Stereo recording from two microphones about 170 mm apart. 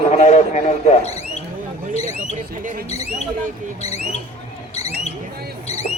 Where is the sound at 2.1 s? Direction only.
50° right (ahead or behind).